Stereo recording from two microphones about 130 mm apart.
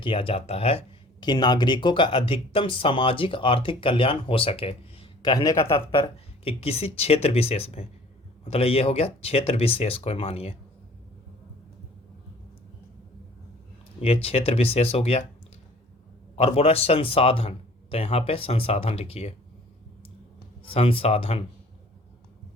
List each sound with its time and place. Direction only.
0.0 s speech: 45° left (ahead or behind)
1.2 s speech: 35° left (ahead or behind)
5.3 s a man's voice: 25° left (ahead or behind)
6.0 s speech: 50° left (ahead or behind)
14.0 s speech: 50° left (ahead or behind)
16.3 s speech: 50° left (ahead or behind)
20.7 s speech: 45° left (ahead or behind)